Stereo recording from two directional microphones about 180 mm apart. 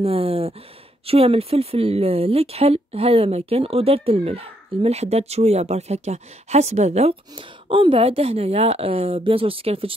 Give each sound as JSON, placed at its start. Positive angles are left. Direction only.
{"t": 0.0, "sound": "speech", "side_deg": -35}